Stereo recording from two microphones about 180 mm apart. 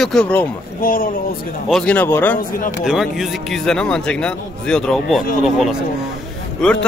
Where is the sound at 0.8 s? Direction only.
50° left (ahead or behind).